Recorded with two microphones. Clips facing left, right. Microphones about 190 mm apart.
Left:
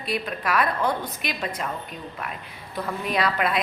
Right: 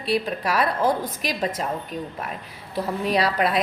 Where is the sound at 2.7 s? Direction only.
35° right (ahead or behind).